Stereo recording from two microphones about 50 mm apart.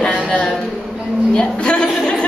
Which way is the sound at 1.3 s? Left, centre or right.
Centre.